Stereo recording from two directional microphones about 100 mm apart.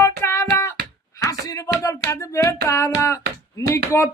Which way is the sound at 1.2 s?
35° left (ahead or behind).